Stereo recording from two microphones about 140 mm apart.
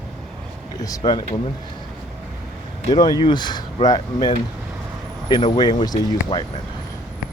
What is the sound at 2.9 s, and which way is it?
Speech, 30° left (ahead or behind).